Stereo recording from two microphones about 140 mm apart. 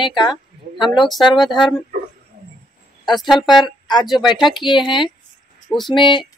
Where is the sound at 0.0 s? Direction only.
35° left (ahead or behind).